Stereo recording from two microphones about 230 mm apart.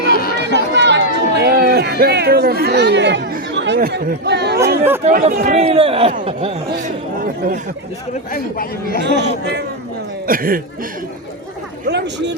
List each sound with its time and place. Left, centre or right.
0.1 s run: left
0.3 s run: right
5.0 s speech: right
8.3 s speech: left
10.2 s speech: right
11.9 s speech: right